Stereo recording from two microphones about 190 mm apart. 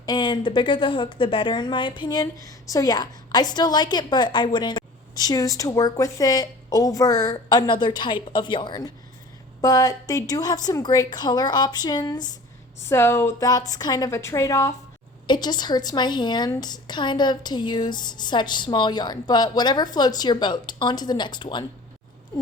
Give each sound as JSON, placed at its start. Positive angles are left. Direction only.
{"t": 0.0, "sound": "a woman's voice", "side_deg": 20}